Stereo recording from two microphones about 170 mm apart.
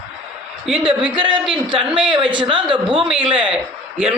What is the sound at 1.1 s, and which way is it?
Speech, 30° right (ahead or behind).